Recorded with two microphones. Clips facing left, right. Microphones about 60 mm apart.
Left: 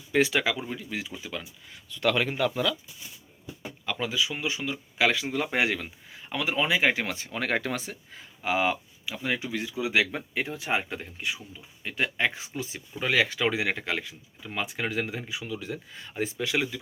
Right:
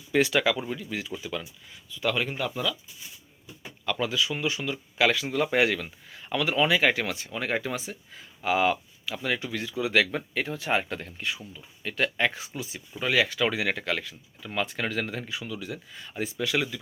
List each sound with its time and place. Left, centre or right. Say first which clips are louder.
0.1 s speech: right 1 dB; left
1.9 s speech: left 2 dB; left
2.4 s speech: left 3 dB; left
3.8 s speech: right 2 dB; centre; by 7.3 s left
7.3 s speech: left 1 dB; left
8.4 s speech: right 2 dB; left
13.0 s speech: even; left